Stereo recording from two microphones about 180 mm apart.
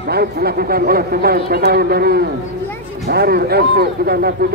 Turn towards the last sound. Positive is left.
turn(degrees=-60)  # may be behind; listen again after turning